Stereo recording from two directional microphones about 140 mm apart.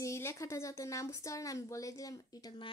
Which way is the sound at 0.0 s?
20° left (ahead or behind).